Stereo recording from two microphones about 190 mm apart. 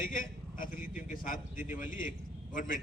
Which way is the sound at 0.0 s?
45° left (ahead or behind).